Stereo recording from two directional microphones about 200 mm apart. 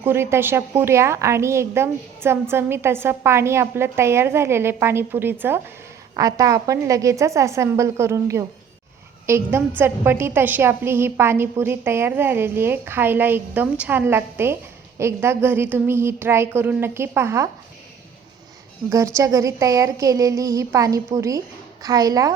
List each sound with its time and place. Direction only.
0.0 s a woman's voice: 10° right (ahead or behind)
18.9 s a woman's voice: 15° right (ahead or behind)